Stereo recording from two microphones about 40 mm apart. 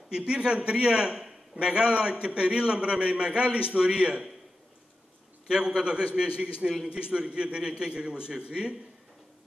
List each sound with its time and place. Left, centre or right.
0.1 s a man's voice: right
1.7 s a man's voice: right
5.5 s a man's voice: centre